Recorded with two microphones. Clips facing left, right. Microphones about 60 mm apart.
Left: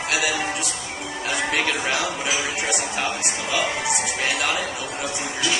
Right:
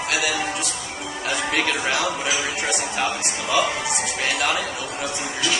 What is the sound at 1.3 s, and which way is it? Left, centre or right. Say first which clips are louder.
Music: even; centre.